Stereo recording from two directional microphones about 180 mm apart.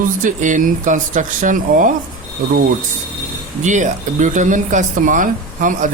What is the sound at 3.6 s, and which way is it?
Speech, 40° right (ahead or behind).